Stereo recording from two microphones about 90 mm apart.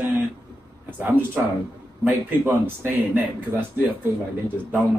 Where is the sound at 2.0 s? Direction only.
20° right (ahead or behind).